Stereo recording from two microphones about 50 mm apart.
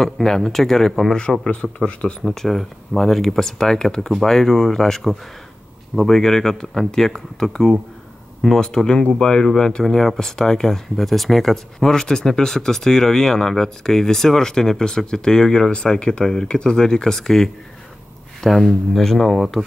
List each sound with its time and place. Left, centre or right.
0.0 s speech: centre
1.9 s speech: left
2.2 s speech: centre